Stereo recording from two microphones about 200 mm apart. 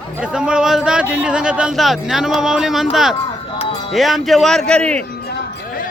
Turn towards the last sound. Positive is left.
turn(degrees=5)  # may be behind; listen again after turning